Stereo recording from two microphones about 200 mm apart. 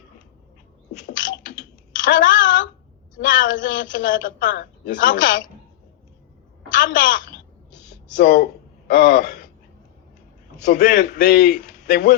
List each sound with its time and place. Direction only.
0.9 s typing: 40° left (ahead or behind)
3.2 s a man's voice: 40° left (ahead or behind)
6.7 s a sound: 45° left (ahead or behind)
8.9 s a man's voice: 45° left (ahead or behind)
10.6 s a man's voice: 45° left (ahead or behind)